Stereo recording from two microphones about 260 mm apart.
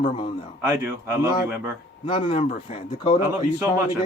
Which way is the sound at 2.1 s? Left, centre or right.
Left.